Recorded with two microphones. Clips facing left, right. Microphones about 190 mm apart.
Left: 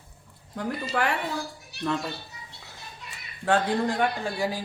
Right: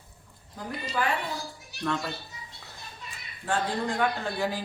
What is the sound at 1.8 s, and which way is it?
Speech, 5° left (ahead or behind).